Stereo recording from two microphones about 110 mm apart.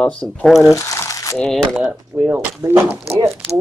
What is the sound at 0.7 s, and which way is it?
Crumpling, 30° left (ahead or behind).